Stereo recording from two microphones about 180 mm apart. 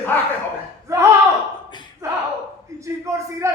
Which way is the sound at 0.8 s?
15° right (ahead or behind).